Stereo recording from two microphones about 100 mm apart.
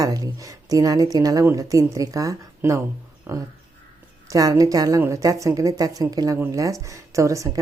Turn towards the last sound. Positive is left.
turn(degrees=-30)  # may be behind; listen again after turning